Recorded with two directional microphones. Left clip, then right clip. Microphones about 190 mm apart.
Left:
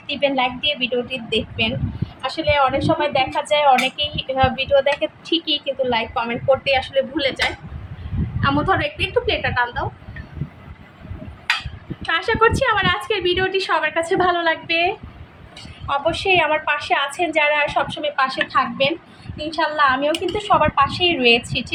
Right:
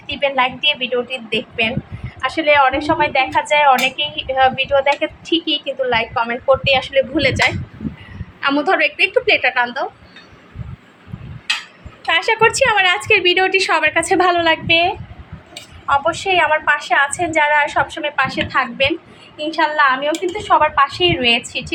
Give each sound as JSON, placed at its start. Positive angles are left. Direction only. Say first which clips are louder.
{"t": 0.1, "sound": "a woman's voice", "louder": "right 2 dB", "side_deg": 10}
{"t": 7.2, "sound": "a woman's voice", "louder": "right 5 dB", "side_deg": -10}
{"t": 12.0, "sound": "a woman's voice", "louder": "right 3 dB", "side_deg": -10}
{"t": 14.7, "sound": "a woman's voice", "louder": "right 5 dB", "side_deg": -5}